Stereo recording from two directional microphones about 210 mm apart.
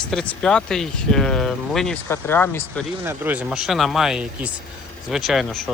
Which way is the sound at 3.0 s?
10° right (ahead or behind).